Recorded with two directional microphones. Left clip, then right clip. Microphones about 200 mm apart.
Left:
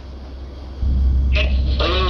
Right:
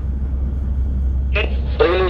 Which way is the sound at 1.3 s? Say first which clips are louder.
Right 5 dB; 60° right (ahead or behind).